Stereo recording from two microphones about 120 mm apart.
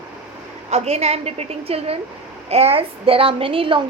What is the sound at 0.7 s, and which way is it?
A woman's voice, 60° right (ahead or behind).